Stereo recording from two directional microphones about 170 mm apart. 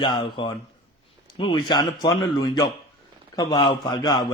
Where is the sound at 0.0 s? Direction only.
25° left (ahead or behind).